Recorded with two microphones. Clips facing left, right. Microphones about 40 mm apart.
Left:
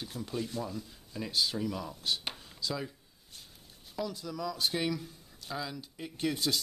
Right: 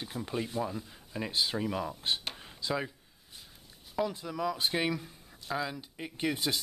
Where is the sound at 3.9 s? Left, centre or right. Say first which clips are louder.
Right 4 dB; right.